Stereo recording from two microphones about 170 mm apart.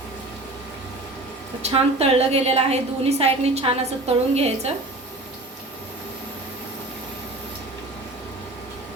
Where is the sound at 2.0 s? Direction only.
35° right (ahead or behind).